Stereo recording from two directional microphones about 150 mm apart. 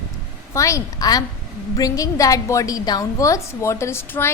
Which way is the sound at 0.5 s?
20° left (ahead or behind).